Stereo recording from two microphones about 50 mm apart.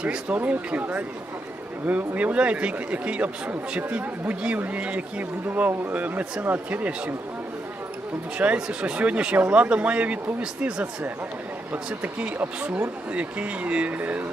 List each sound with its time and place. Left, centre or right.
0.0 s speech: right
8.4 s speech: right
12.0 s speech: right